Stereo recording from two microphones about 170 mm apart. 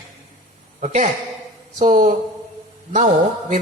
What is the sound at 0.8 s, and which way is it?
A man's voice, 45° right (ahead or behind).